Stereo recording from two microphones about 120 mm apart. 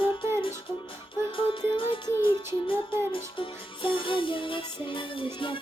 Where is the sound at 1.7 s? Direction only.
45° left (ahead or behind).